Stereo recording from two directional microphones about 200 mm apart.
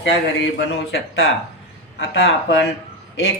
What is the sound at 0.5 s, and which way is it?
A woman's voice, 60° left (ahead or behind).